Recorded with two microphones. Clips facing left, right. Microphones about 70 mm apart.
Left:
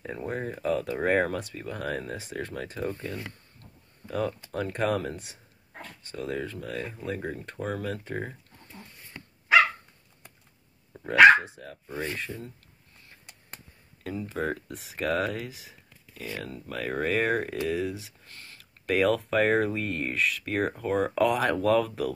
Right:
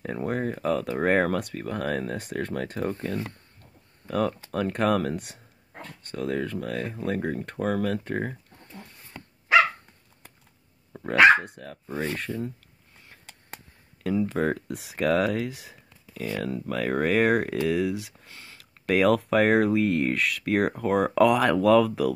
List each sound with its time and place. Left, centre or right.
0.0 s speech: right
11.1 s speech: right
14.0 s speech: right
16.4 s speech: right